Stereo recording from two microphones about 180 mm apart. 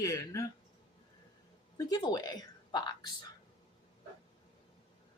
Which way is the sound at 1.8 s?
20° left (ahead or behind).